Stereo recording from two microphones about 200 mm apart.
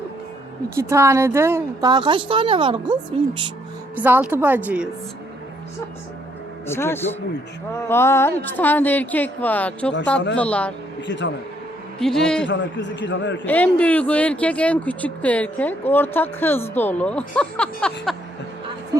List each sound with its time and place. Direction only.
0.8 s a woman's voice: 15° right (ahead or behind)
3.9 s a woman's voice: 10° right (ahead or behind)
6.7 s speech: 10° left (ahead or behind)
11.0 s a man's voice: 65° left (ahead or behind)
11.9 s a man's voice: 5° left (ahead or behind)
12.5 s a man's voice: 65° left (ahead or behind)
13.4 s speech: 10° left (ahead or behind)